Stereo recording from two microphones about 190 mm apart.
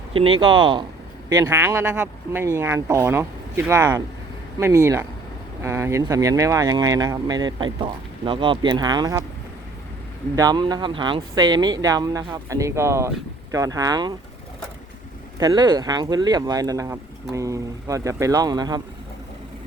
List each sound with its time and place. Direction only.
0.1 s speech: 25° right (ahead or behind)
10.3 s speech: 20° right (ahead or behind)
15.4 s speech: 20° right (ahead or behind)